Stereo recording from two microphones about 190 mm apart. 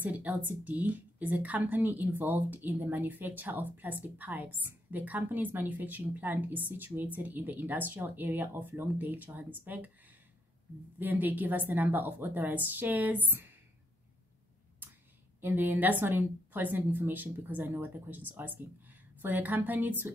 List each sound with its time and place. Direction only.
0.0 s a woman's voice: 5° right (ahead or behind)
11.0 s a woman's voice: 10° right (ahead or behind)
15.4 s a woman's voice: 10° right (ahead or behind)